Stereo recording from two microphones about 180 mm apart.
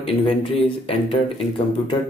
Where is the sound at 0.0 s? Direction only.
30° left (ahead or behind).